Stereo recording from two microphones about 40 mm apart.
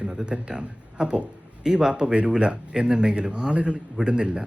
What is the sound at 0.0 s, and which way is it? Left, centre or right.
A man's voice, right.